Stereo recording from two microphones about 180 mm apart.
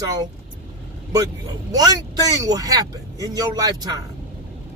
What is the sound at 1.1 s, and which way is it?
Speech, 20° right (ahead or behind).